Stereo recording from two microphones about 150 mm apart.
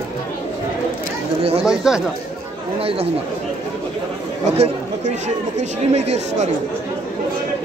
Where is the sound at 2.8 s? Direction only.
40° right (ahead or behind).